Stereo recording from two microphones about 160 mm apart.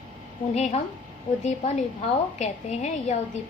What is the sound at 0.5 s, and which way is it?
A woman's voice, 45° left (ahead or behind).